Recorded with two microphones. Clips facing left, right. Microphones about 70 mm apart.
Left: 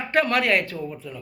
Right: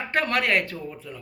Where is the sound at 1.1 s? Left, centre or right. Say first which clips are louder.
Left 3 dB; right.